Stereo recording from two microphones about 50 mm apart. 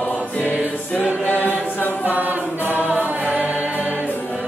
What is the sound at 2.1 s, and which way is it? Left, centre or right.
A capella, right.